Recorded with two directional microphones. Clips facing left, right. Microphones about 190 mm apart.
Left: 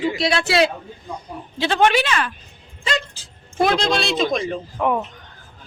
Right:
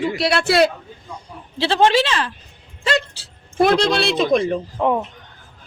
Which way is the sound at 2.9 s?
70° right (ahead or behind).